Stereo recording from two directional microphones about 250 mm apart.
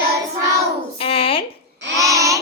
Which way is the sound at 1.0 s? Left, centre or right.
Left.